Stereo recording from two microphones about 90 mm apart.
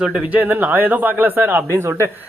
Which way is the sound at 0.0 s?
5° right (ahead or behind).